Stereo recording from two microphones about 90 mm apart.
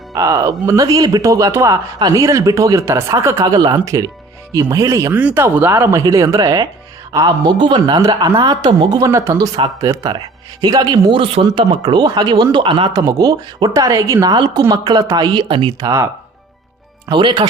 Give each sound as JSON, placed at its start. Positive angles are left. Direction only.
{"t": 0.1, "sound": "speech", "side_deg": -40}
{"t": 3.4, "sound": "speech", "side_deg": -50}
{"t": 5.1, "sound": "speech", "side_deg": -20}
{"t": 5.9, "sound": "speech", "side_deg": -35}
{"t": 7.6, "sound": "speech", "side_deg": -60}
{"t": 9.0, "sound": "speech", "side_deg": -35}
{"t": 9.8, "sound": "speech", "side_deg": -45}
{"t": 11.1, "sound": "speech", "side_deg": -85}
{"t": 11.5, "sound": "a man's voice", "side_deg": -60}
{"t": 12.9, "sound": "speech", "side_deg": -45}
{"t": 14.3, "sound": "a man's voice", "side_deg": -55}
{"t": 15.8, "sound": "speech", "side_deg": -35}
{"t": 17.1, "sound": "a man's voice", "side_deg": -60}